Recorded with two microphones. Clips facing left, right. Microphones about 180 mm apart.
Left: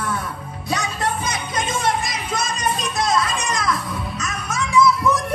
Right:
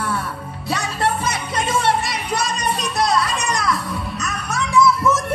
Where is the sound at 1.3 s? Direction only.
60° right (ahead or behind).